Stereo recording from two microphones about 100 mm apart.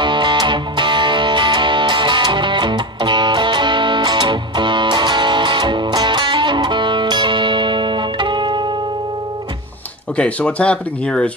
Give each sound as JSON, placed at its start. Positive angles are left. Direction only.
{"t": 0.0, "sound": "music", "side_deg": -55}
{"t": 10.1, "sound": "speech", "side_deg": 15}